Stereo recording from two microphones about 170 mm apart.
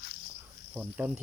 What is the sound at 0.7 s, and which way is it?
Speech, 10° right (ahead or behind).